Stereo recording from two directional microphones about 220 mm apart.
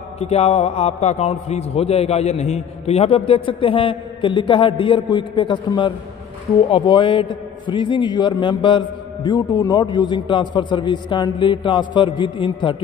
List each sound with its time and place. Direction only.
0.2 s a man's voice: 30° left (ahead or behind)